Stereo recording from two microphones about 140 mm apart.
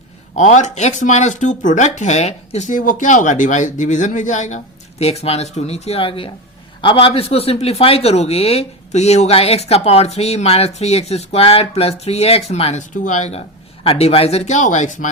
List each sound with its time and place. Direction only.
0.3 s speech: 55° left (ahead or behind)
13.8 s speech: 45° left (ahead or behind); by 15.1 s 60° left (ahead or behind)